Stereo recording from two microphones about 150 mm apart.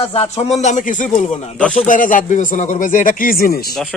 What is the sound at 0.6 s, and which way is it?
Speech, 55° left (ahead or behind).